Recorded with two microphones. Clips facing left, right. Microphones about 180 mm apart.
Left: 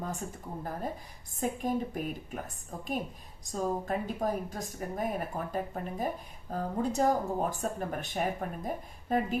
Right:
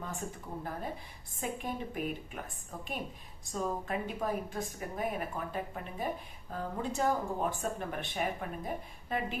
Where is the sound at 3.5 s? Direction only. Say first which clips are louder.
Left 3 dB; 40° left (ahead or behind).